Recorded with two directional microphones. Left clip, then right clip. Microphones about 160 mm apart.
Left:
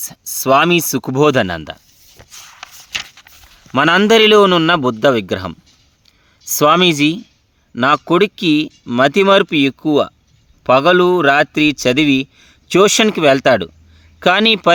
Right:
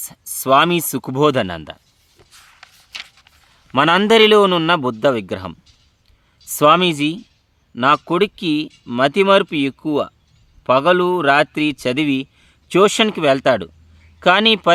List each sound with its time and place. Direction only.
0.0 s a man's voice: 30° left (ahead or behind)
2.4 s a sound: 45° left (ahead or behind)
3.7 s a man's voice: 30° left (ahead or behind)